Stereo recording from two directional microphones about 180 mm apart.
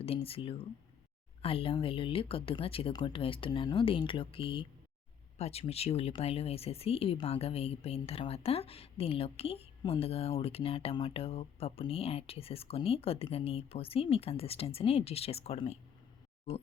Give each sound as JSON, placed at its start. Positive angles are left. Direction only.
{"t": 0.0, "sound": "speech", "side_deg": 30}